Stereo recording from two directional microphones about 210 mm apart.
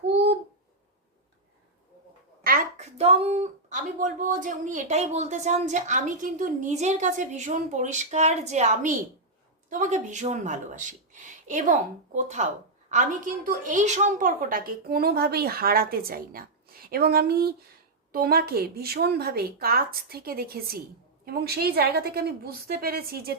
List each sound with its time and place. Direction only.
0.1 s babbling: 55° right (ahead or behind)
2.4 s a woman's voice: 40° right (ahead or behind)